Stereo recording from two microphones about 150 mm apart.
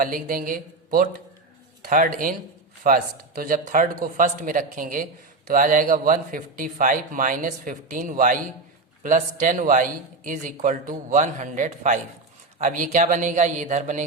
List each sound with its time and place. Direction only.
0.0 s a man's voice: 65° right (ahead or behind)